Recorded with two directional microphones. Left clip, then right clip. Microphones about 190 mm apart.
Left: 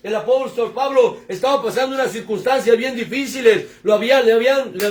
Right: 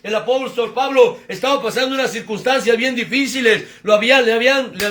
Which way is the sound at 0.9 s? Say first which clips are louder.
Right 3 dB; 25° left (ahead or behind).